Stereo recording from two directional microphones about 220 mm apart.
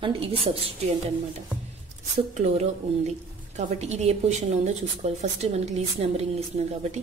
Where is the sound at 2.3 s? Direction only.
30° right (ahead or behind).